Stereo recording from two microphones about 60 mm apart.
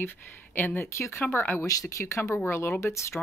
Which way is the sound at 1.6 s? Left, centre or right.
Left.